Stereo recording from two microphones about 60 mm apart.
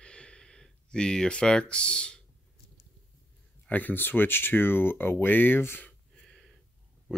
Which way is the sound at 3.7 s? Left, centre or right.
Left.